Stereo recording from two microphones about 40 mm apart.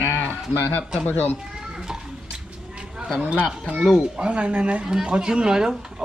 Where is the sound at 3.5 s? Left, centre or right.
Right.